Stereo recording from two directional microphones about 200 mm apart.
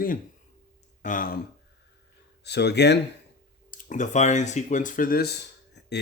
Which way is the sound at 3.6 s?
40° left (ahead or behind).